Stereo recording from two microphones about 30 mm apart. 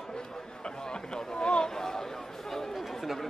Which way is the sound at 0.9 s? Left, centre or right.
Left.